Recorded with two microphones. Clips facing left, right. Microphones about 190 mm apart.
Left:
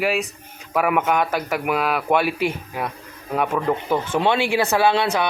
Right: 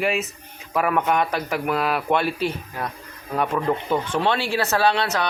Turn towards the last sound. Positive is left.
turn(degrees=10)  # may be behind; listen again after turning